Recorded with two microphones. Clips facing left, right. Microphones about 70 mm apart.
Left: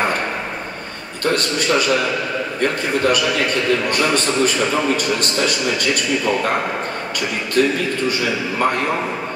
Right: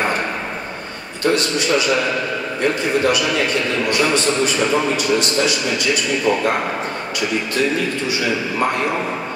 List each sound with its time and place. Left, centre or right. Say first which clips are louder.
1.2 s a man's voice: right 1 dB; left
4.9 s a man's voice: right 2 dB; left